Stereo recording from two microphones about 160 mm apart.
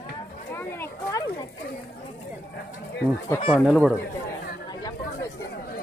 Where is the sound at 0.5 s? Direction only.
15° left (ahead or behind).